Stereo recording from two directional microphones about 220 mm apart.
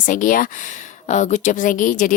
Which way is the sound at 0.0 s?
35° left (ahead or behind).